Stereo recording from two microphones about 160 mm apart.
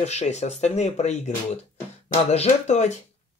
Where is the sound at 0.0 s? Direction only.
45° left (ahead or behind).